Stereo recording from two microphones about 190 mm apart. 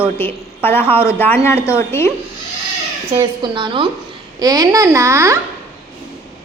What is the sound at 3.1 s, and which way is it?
A woman's voice, 25° right (ahead or behind).